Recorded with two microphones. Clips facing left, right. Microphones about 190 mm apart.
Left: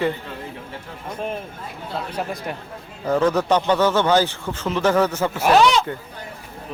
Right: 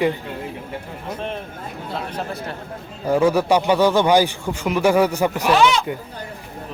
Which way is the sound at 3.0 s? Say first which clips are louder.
Right 2 dB; 10° right (ahead or behind).